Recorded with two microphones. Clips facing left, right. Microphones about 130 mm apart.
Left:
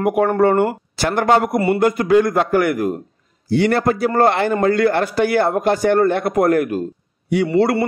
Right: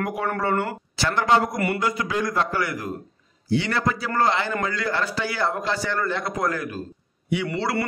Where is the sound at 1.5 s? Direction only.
25° left (ahead or behind).